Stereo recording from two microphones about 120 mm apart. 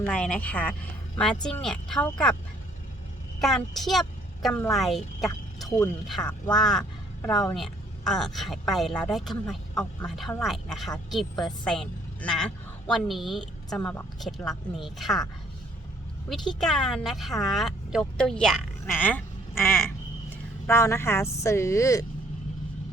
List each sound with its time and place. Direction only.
0.0 s speech: 10° left (ahead or behind)
3.4 s speech: centre (ahead or behind)
5.2 s vehicle: centre (ahead or behind)
6.1 s a woman's voice: centre (ahead or behind)
13.7 s speech: 15° left (ahead or behind)
14.2 s speech: centre (ahead or behind)
16.6 s speech: 5° left (ahead or behind)
18.9 s speech: 15° left (ahead or behind)